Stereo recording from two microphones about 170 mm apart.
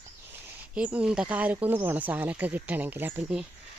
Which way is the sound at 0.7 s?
10° right (ahead or behind).